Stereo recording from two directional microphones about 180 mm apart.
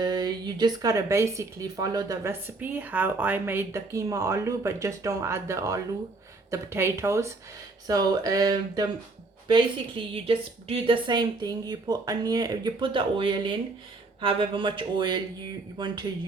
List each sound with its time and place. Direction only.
0.0 s speech: 20° right (ahead or behind)